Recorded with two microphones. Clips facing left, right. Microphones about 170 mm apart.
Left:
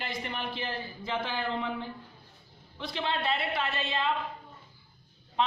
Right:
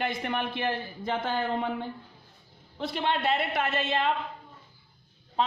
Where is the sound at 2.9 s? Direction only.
50° right (ahead or behind).